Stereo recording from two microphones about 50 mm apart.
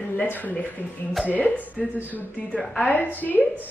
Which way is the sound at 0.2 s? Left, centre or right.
Left.